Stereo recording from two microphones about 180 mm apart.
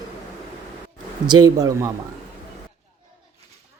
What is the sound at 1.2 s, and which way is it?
Speech, 20° right (ahead or behind).